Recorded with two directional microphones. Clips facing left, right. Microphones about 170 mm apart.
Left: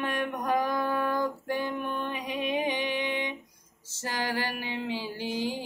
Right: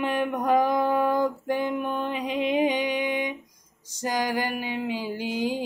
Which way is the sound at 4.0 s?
15° right (ahead or behind).